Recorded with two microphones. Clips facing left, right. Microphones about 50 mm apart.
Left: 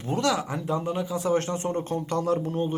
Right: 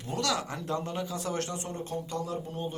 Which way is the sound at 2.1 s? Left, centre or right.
Left.